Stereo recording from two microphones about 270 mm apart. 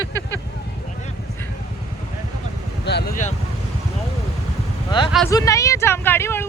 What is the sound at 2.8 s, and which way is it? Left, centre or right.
Speech, left.